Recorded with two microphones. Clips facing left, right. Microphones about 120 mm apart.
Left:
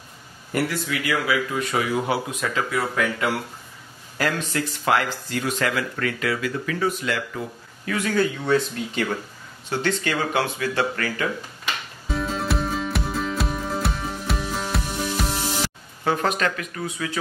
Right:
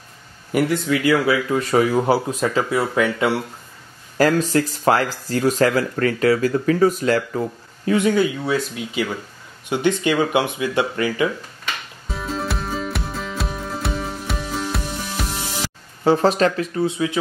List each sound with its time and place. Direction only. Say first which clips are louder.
0.5 s speech: right 5 dB; 10° right (ahead or behind)
0.8 s speech: right 7 dB; 30° right (ahead or behind)
4.2 s speech: right 8 dB; 40° right (ahead or behind)
7.9 s speech: right 7 dB; 25° right (ahead or behind)
8.2 s speech: right 1 dB; 5° right (ahead or behind)
9.7 s speech: right 5 dB; 15° right (ahead or behind)
12.1 s music: left 1 dB; centre (ahead or behind)
16.0 s speech: right 7 dB; 30° right (ahead or behind)